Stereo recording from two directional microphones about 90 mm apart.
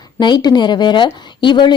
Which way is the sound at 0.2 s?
55° left (ahead or behind).